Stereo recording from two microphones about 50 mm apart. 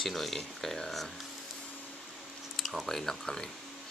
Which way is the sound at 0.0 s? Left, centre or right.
Centre.